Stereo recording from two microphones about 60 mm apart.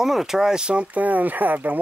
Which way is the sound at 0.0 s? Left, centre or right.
Centre.